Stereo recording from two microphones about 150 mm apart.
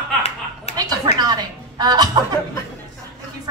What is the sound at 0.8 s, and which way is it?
A woman's voice, 30° right (ahead or behind).